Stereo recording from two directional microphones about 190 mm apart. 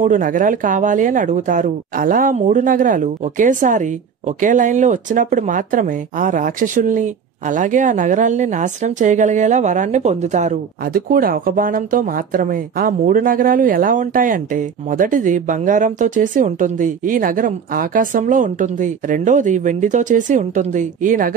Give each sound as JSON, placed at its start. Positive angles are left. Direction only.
{"t": 0.0, "sound": "speech", "side_deg": -45}